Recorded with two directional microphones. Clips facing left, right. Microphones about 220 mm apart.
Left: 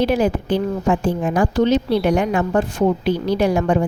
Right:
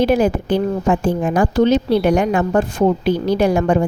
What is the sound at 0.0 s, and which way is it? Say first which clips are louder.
A woman's voice: right 3 dB; 50° right (ahead or behind).